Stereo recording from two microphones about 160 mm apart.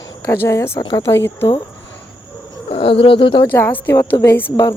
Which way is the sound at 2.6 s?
35° left (ahead or behind).